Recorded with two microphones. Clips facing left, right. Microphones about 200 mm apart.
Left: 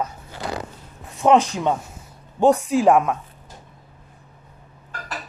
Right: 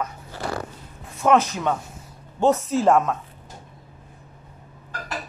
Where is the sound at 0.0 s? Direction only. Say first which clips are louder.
Left 1 dB; 20° left (ahead or behind).